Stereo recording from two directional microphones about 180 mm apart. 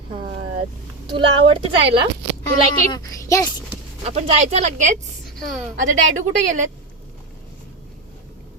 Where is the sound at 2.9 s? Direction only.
20° left (ahead or behind).